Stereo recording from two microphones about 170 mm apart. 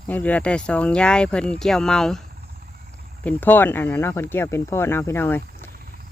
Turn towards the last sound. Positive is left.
turn(degrees=10)  # may be behind; listen again after turning